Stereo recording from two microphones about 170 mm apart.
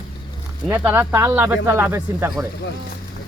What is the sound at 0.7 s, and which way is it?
Speech, 15° right (ahead or behind).